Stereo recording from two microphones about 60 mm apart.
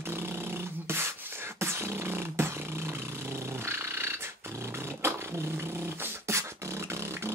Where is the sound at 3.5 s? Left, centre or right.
Right.